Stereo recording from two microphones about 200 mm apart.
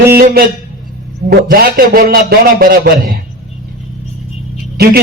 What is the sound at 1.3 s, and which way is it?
Speech, 50° right (ahead or behind).